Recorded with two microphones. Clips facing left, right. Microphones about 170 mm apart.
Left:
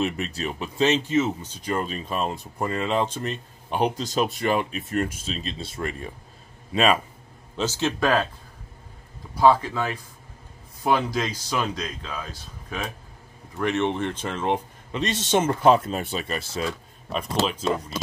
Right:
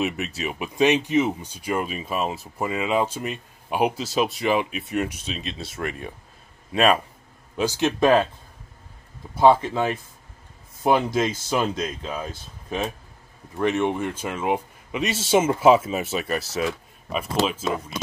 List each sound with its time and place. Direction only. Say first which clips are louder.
0.0 s speech: even; 5° right (ahead or behind)
7.5 s speech: right 3 dB; 15° right (ahead or behind)
9.3 s speech: right 2 dB; 25° right (ahead or behind)
13.6 s speech: right 2 dB; 15° right (ahead or behind)